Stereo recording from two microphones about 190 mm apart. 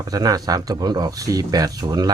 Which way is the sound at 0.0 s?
20° right (ahead or behind).